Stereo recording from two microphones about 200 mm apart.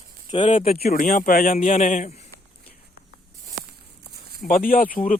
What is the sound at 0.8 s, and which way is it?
A man's voice, 45° left (ahead or behind).